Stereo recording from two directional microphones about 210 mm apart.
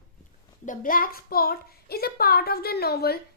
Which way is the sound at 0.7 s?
40° left (ahead or behind).